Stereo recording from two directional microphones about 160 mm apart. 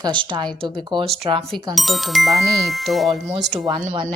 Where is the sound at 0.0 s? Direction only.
30° right (ahead or behind).